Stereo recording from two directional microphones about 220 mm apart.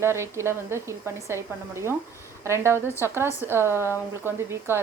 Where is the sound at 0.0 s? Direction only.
10° right (ahead or behind).